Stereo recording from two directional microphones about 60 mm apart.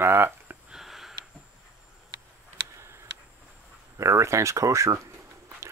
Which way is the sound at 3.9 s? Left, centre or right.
Right.